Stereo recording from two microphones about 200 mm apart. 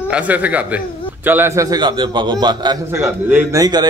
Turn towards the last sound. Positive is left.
turn(degrees=-20)  # may be behind; listen again after turning